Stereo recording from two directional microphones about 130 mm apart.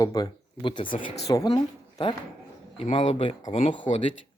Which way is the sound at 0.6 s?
40° left (ahead or behind).